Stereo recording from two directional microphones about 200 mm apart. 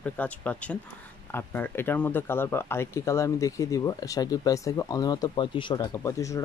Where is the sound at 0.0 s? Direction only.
10° left (ahead or behind).